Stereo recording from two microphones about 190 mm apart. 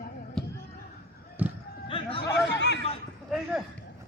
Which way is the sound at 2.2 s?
65° left (ahead or behind).